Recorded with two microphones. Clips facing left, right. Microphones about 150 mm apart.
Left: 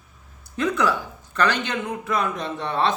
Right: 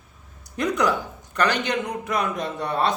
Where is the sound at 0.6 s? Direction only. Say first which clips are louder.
Even; 15° right (ahead or behind).